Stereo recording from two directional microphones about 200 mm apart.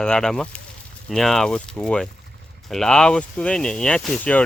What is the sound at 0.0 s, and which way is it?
Speech, 5° left (ahead or behind).